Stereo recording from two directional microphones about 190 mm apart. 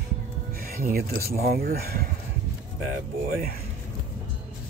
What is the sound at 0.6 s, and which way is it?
Speech, 50° right (ahead or behind).